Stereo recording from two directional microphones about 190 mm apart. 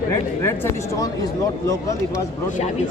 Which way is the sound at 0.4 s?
15° left (ahead or behind).